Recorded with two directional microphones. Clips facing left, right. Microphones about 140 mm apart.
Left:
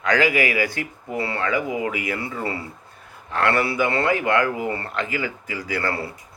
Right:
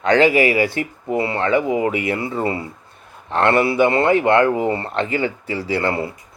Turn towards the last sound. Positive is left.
turn(degrees=-25)  # may be behind; listen again after turning